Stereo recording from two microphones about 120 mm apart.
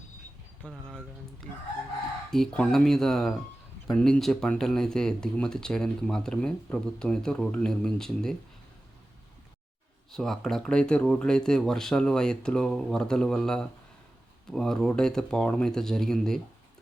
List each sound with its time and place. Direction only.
0.7 s speech: centre (ahead or behind)
10.1 s speech: 5° left (ahead or behind)